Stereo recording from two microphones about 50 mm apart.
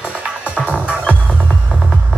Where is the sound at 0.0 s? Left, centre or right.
Right.